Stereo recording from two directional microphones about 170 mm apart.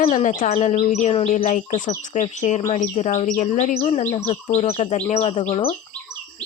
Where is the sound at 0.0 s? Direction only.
45° left (ahead or behind).